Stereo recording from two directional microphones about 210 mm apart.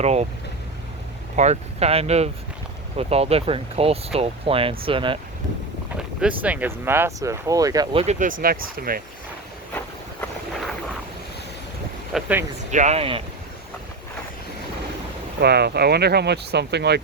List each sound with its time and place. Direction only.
0.0 s speech: 30° right (ahead or behind)
1.4 s speech: 30° right (ahead or behind)
6.1 s speech: 5° right (ahead or behind)
8.0 s speech: 40° right (ahead or behind)
12.1 s speech: 10° right (ahead or behind)
12.7 s speech: 35° right (ahead or behind)
15.4 s speech: 50° right (ahead or behind)